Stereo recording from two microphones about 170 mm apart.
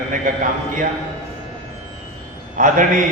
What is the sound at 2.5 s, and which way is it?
Speech, 50° right (ahead or behind).